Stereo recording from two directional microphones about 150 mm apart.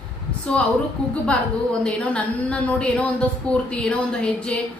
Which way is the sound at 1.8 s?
5° left (ahead or behind).